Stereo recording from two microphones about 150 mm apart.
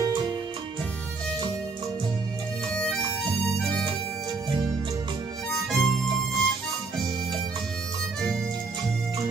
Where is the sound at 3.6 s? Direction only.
5° left (ahead or behind).